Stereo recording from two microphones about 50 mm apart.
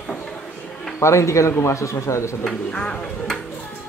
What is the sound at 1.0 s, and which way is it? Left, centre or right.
A man's voice, left.